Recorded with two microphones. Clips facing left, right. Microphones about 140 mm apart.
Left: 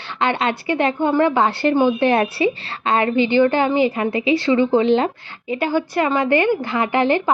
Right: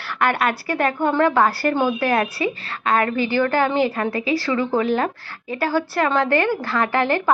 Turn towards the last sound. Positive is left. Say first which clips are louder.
# left 2 dB
turn(degrees=20)  # may be behind; listen again after turning